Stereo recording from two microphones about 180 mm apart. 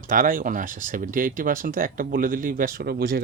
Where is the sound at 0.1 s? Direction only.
50° right (ahead or behind).